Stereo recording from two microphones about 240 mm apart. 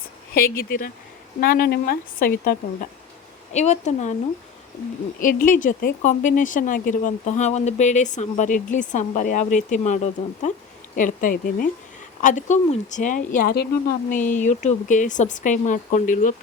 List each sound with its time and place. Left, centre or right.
0.3 s speech: left
5.2 s speech: left